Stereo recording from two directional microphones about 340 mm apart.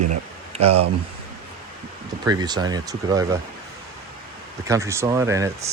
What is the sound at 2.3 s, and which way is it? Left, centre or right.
Speech, centre.